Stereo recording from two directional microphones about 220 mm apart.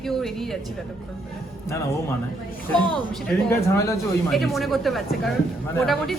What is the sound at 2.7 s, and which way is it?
Speech, 5° left (ahead or behind).